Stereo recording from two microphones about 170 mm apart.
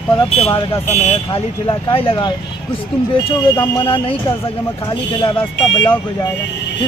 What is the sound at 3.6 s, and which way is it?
Speech, 30° left (ahead or behind).